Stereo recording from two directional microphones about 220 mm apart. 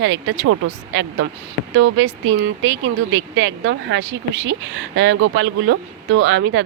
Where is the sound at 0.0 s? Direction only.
60° right (ahead or behind).